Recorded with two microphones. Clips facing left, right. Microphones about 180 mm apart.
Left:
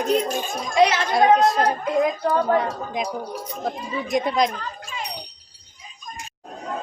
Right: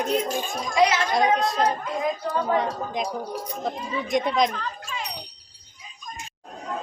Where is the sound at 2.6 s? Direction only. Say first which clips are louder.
Left 1 dB; centre (ahead or behind).